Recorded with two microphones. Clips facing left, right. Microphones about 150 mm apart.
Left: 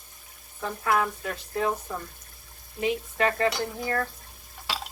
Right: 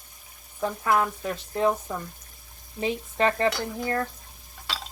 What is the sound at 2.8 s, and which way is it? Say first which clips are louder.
Speech: even; 30° right (ahead or behind).